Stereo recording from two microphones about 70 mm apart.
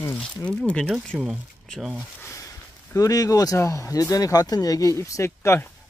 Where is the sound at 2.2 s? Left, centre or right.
Left.